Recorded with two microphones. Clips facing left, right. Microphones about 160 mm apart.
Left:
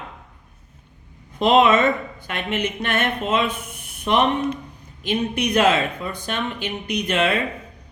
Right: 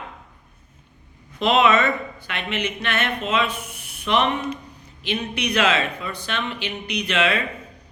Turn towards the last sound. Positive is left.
turn(degrees=50)  # may be behind; listen again after turning